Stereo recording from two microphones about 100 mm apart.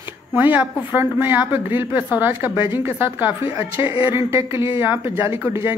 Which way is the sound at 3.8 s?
65° left (ahead or behind).